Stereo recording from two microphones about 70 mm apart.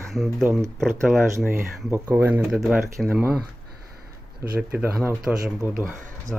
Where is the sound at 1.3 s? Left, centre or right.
Right.